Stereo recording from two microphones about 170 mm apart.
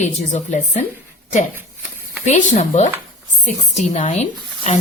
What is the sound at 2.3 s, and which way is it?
Speech, 40° left (ahead or behind).